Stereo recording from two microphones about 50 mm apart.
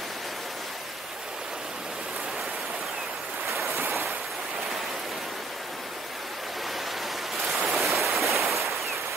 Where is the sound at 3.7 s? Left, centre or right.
Right.